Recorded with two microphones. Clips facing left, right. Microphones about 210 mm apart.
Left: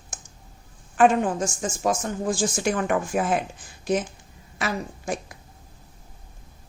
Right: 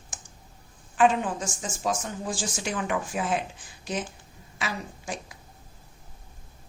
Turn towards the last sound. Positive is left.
turn(degrees=50)  # may be behind; listen again after turning